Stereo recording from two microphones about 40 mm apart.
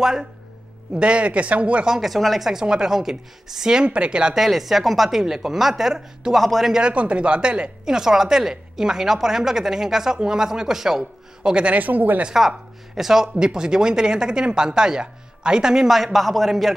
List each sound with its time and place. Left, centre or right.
0.0 s speech: centre
0.9 s speech: right
1.9 s a man's voice: centre
2.5 s speech: centre
3.9 s speech: right
4.4 s a man's voice: centre
6.7 s speech: right; by 11.1 s centre
11.4 s speech: right
11.8 s speech: right
12.4 s speech: centre
15.9 s a man's voice: centre